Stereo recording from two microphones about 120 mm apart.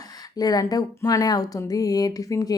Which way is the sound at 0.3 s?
30° left (ahead or behind).